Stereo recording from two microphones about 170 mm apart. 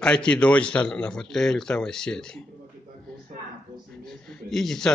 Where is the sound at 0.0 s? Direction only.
5° left (ahead or behind).